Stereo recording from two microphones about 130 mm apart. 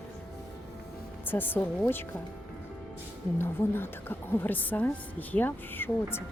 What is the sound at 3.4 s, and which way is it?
A woman's voice, 15° left (ahead or behind).